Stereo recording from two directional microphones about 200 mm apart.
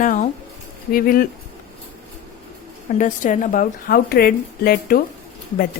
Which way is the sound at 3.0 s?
40° left (ahead or behind).